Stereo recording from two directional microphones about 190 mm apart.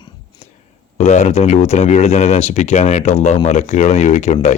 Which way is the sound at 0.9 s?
35° left (ahead or behind).